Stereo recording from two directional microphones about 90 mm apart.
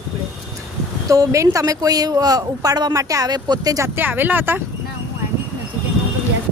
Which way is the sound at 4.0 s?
20° right (ahead or behind).